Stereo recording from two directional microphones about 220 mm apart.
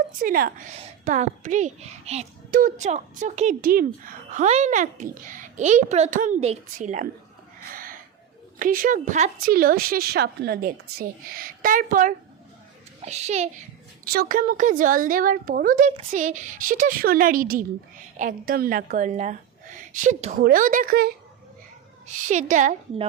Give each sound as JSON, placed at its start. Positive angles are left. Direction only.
{"t": 0.2, "sound": "a woman's voice", "side_deg": -40}
{"t": 7.7, "sound": "a sound", "side_deg": -40}
{"t": 8.5, "sound": "a woman's voice", "side_deg": -40}
{"t": 14.0, "sound": "a woman's voice", "side_deg": -40}